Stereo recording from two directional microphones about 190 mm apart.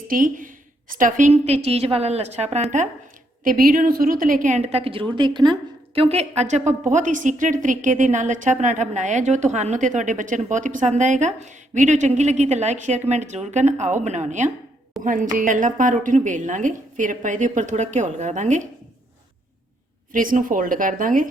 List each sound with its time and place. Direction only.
0.1 s a woman's voice: 45° right (ahead or behind)
3.4 s a woman's voice: 45° right (ahead or behind)
20.1 s a woman's voice: 45° right (ahead or behind)